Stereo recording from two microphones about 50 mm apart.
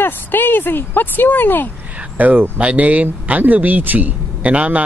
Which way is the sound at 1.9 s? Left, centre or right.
Right.